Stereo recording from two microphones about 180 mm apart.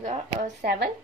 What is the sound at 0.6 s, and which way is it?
Speech, 60° right (ahead or behind).